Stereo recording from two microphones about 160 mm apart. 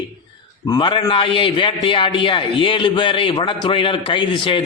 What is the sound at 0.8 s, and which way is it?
A man's voice, 30° left (ahead or behind).